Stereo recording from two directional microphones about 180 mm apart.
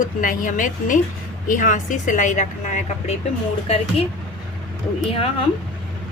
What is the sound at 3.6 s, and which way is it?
Speech, 35° left (ahead or behind).